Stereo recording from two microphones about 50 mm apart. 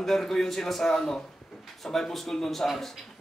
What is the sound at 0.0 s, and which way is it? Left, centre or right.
A man's voice, centre.